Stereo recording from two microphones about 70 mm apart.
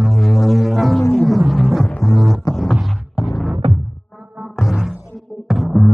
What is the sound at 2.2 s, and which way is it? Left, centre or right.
Music, centre.